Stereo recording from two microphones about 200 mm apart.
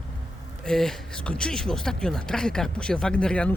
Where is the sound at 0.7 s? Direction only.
Centre (ahead or behind).